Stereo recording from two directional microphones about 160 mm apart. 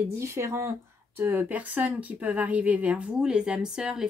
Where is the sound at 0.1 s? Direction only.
15° right (ahead or behind).